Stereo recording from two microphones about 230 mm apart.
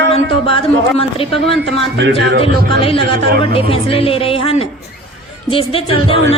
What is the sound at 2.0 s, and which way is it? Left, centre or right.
Speech, right.